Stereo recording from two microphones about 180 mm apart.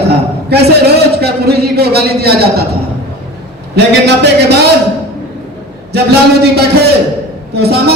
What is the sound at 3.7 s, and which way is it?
Speech, 65° right (ahead or behind).